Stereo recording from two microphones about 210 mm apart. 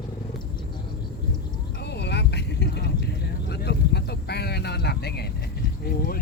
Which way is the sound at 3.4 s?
50° left (ahead or behind).